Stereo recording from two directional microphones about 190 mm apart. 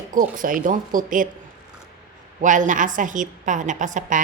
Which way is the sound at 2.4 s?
40° right (ahead or behind).